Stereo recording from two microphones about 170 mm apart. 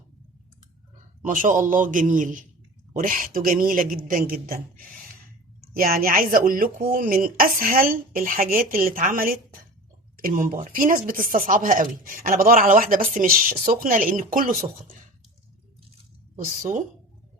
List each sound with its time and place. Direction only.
1.2 s a man's voice: 50° right (ahead or behind)